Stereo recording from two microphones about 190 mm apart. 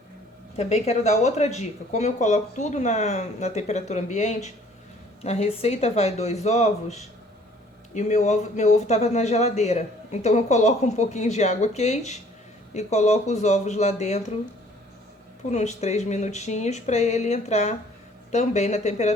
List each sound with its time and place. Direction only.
0.5 s speech: 35° left (ahead or behind)
15.4 s speech: 35° left (ahead or behind)